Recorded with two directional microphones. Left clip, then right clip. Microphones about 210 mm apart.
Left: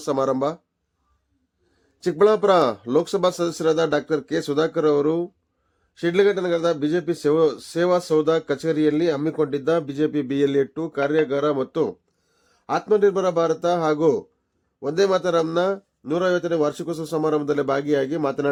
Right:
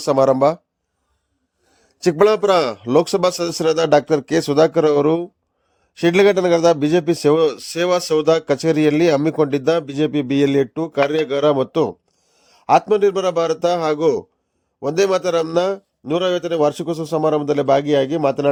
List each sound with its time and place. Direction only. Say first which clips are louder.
0.0 s a man's voice: right 8 dB; 25° right (ahead or behind)
2.0 s a man's voice: right 3 dB; 30° right (ahead or behind)